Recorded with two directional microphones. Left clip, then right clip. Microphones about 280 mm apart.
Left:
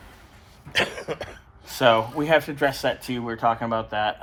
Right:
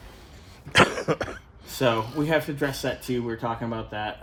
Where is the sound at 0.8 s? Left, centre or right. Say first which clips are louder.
Right 5 dB; right.